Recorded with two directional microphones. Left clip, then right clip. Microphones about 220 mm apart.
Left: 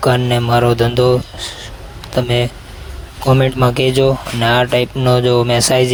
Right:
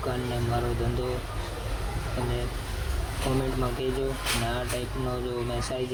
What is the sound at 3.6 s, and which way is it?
Speech, 50° left (ahead or behind).